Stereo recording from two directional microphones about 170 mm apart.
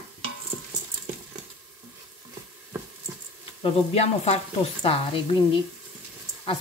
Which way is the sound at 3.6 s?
40° left (ahead or behind).